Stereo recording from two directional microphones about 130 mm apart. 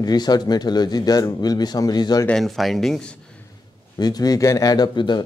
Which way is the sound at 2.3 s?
Centre (ahead or behind).